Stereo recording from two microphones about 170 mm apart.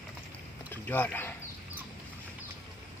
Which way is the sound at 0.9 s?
10° left (ahead or behind).